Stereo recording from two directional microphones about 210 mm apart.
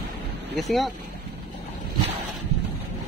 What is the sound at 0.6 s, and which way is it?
Speech, centre (ahead or behind).